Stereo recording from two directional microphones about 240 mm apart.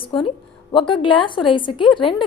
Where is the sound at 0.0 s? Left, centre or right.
Left.